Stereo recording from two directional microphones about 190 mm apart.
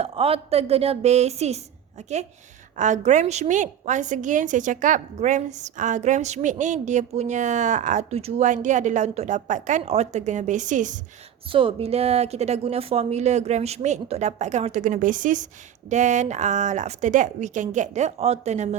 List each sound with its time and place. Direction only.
0.0 s a woman's voice: 30° right (ahead or behind)
11.4 s a woman's voice: 30° right (ahead or behind)